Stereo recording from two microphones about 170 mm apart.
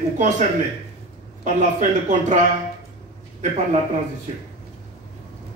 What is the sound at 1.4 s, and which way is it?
A man's voice, 45° right (ahead or behind).